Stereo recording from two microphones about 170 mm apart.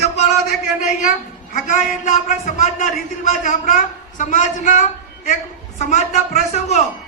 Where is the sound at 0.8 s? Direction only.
45° left (ahead or behind).